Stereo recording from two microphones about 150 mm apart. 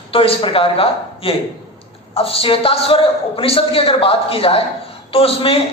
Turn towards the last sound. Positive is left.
turn(degrees=40)  # may be behind; listen again after turning